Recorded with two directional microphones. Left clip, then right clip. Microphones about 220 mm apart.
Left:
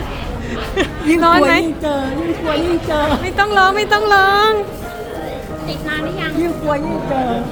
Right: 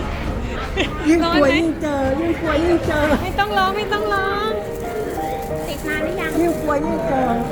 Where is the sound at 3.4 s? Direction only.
40° left (ahead or behind).